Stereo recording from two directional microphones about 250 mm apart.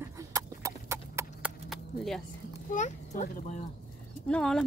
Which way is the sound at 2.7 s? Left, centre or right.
Left.